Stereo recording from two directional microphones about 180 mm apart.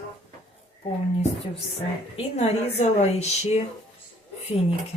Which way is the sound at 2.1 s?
40° left (ahead or behind).